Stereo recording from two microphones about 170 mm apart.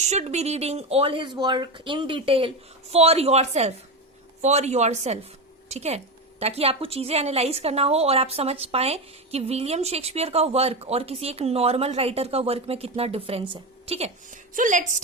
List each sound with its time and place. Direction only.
0.0 s a woman's voice: 40° right (ahead or behind)
14.5 s a woman's voice: 50° right (ahead or behind)